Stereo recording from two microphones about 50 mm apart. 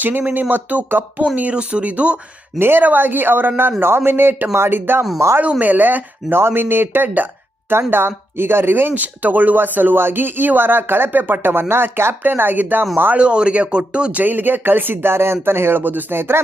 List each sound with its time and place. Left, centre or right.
0.0 s speech: right
1.4 s speech: right
2.6 s speech: right
5.4 s speech: right
8.9 s speech: right
13.1 s speech: right
15.8 s speech: right